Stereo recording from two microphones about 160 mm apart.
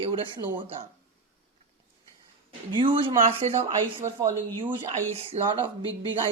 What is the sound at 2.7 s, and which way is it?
Speech, 30° right (ahead or behind).